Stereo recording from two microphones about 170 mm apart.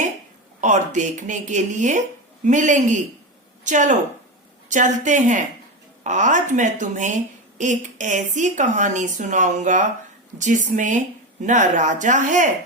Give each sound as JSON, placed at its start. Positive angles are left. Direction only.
{"t": 0.6, "sound": "speech", "side_deg": -45}